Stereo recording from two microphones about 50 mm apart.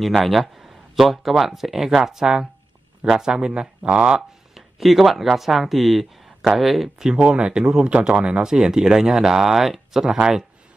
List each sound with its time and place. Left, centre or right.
0.0 s speech: centre; by 4.2 s right
4.6 s speech: centre